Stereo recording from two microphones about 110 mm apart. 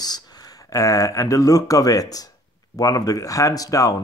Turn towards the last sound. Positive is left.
turn(degrees=30)  # may be behind; listen again after turning